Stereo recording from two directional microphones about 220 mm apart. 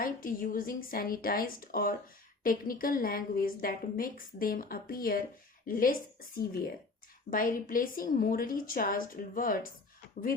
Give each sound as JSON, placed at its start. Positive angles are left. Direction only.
{"t": 0.0, "sound": "a woman's voice", "side_deg": 40}